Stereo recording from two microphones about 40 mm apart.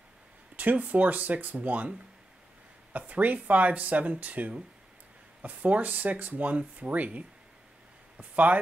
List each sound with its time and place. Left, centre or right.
0.6 s speech: right
2.9 s speech: right